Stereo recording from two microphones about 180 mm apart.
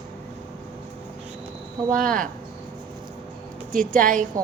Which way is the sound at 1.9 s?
45° right (ahead or behind).